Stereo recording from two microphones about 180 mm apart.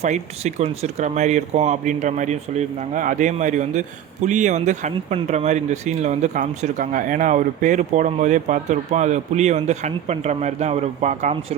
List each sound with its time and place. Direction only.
0.0 s speech: 40° right (ahead or behind)